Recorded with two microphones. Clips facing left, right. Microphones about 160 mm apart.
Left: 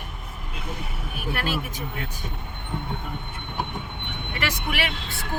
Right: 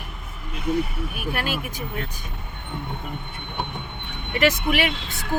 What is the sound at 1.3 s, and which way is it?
Speech, 15° right (ahead or behind).